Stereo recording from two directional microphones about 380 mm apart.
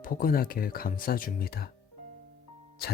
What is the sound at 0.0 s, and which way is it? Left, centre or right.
Speech, left.